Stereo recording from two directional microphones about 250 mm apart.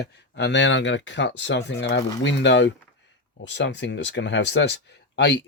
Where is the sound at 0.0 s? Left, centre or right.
Left.